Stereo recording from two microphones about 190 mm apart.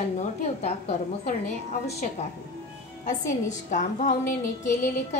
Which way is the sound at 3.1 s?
40° left (ahead or behind).